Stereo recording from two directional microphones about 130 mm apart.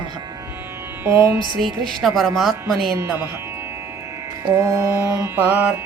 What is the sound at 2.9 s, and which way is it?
Music, 20° right (ahead or behind).